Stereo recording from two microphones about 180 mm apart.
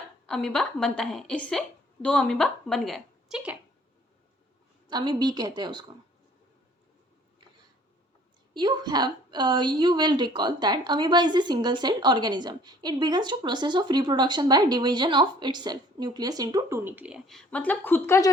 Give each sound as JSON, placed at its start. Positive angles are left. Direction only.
{"t": 0.3, "sound": "a woman's voice", "side_deg": 5}
{"t": 4.9, "sound": "a woman's voice", "side_deg": -25}
{"t": 8.5, "sound": "a woman's voice", "side_deg": -25}